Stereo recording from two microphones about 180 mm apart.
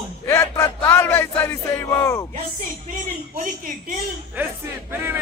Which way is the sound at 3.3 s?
50° right (ahead or behind).